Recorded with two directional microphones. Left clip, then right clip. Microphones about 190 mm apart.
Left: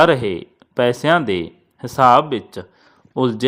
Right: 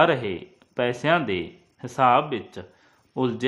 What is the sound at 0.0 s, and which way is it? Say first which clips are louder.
A man's voice: left 6 dB; 30° left (ahead or behind).